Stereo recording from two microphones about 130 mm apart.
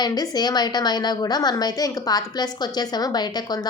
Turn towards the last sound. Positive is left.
turn(degrees=30)  # may be behind; listen again after turning